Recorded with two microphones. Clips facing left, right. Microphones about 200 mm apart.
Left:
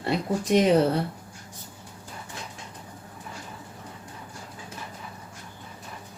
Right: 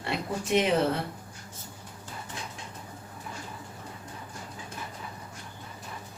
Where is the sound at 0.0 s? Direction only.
40° left (ahead or behind).